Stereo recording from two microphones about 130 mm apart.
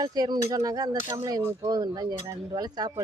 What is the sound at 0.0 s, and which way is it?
Speech, 30° right (ahead or behind).